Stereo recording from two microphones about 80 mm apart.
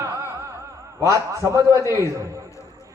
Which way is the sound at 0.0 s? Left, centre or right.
Right.